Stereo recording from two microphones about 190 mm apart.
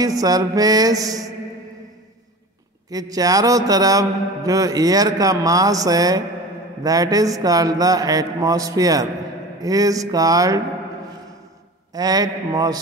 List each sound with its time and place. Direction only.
0.0 s mantra: 20° right (ahead or behind)
2.9 s mantra: 20° right (ahead or behind)
11.9 s mantra: 20° right (ahead or behind)